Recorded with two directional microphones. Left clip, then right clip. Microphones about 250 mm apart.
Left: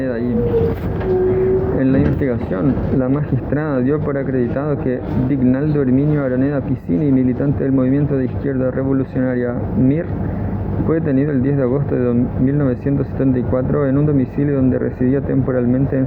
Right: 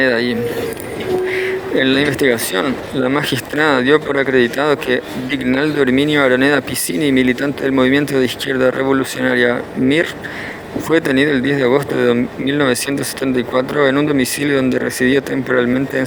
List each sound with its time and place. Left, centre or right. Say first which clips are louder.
0.0 s speech: right 7 dB; right
1.8 s speech: right 4 dB; right